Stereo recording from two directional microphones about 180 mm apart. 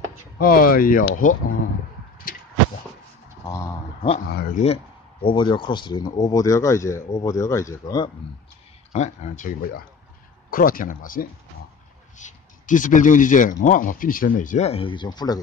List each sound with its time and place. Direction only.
0.4 s speech: 55° left (ahead or behind)
3.4 s speech: 15° left (ahead or behind)
4.3 s speech: 60° left (ahead or behind)
5.2 s speech: 25° left (ahead or behind)
8.9 s speech: 40° left (ahead or behind); by 15.4 s 20° left (ahead or behind)